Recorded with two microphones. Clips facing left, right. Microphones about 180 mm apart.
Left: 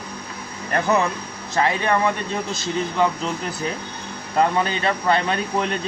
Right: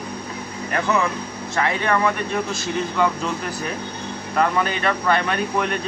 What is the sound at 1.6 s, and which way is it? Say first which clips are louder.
Speech: left 1 dB; 25° left (ahead or behind).